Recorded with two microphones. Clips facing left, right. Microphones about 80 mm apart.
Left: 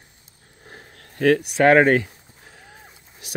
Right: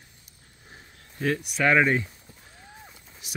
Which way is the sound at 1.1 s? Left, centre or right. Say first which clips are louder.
Left 9 dB; left.